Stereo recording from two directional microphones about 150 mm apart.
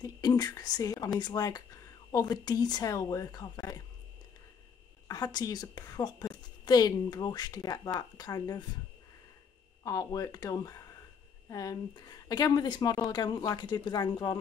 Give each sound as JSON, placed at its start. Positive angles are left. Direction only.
{"t": 0.0, "sound": "a woman's voice", "side_deg": 25}
{"t": 5.0, "sound": "a woman's voice", "side_deg": 25}
{"t": 9.8, "sound": "a woman's voice", "side_deg": 20}